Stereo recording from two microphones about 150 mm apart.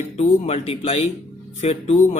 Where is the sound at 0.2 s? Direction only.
45° left (ahead or behind).